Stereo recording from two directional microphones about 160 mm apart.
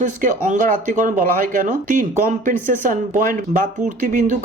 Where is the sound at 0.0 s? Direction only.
55° right (ahead or behind).